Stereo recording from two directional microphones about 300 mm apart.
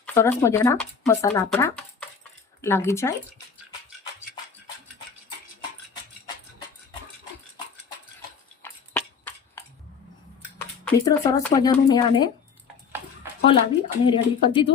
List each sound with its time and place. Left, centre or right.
0.0 s speech: centre
8.6 s a sound: centre
10.6 s speech: centre
13.4 s speech: centre